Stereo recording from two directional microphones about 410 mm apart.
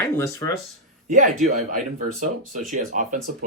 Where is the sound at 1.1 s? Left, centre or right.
Centre.